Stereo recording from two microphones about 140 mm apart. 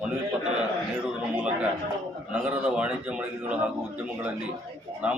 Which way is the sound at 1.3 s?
10° right (ahead or behind).